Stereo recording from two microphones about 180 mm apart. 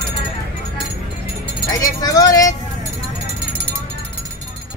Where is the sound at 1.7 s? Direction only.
20° left (ahead or behind).